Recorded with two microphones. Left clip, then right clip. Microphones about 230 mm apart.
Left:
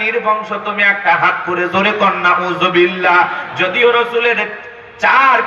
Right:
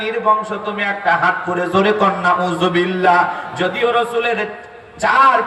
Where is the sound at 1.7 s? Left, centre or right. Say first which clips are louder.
Left 1 dB; right.